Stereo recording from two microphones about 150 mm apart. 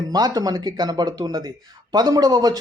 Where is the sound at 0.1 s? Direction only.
25° right (ahead or behind).